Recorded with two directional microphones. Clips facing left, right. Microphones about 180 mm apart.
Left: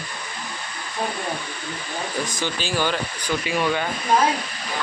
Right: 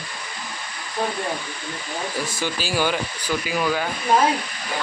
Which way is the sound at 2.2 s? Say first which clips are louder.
Even; 5° right (ahead or behind).